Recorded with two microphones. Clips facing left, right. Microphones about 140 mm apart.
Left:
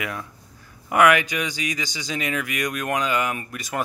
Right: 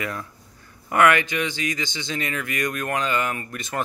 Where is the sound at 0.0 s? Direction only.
5° left (ahead or behind).